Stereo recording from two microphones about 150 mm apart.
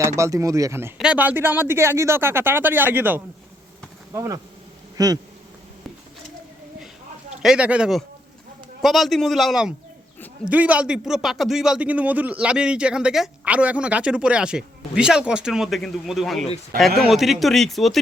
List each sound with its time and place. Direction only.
0.2 s speech: 20° right (ahead or behind)
4.9 s bee: 25° right (ahead or behind)
7.4 s speech: 5° right (ahead or behind)
16.7 s speech: 75° right (ahead or behind)
17.1 s speech: centre (ahead or behind)